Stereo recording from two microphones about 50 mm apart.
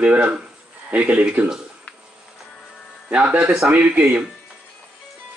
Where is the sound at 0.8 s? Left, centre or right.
Right.